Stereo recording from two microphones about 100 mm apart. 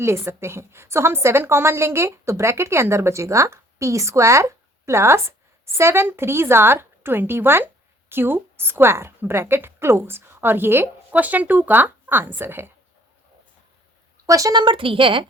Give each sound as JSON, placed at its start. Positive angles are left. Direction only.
{"t": 0.0, "sound": "a woman's voice", "side_deg": -25}
{"t": 14.3, "sound": "speech", "side_deg": -35}
{"t": 14.6, "sound": "a woman's voice", "side_deg": -60}